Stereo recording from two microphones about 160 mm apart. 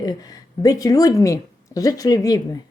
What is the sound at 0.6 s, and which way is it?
A woman's voice, 20° left (ahead or behind).